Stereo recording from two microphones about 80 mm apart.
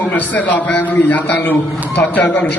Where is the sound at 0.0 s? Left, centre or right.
Left.